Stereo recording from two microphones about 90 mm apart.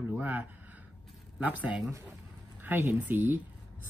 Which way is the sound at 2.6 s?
20° right (ahead or behind).